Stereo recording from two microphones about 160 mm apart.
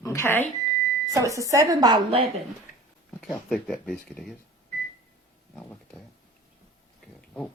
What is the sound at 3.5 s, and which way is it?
Speech, centre (ahead or behind).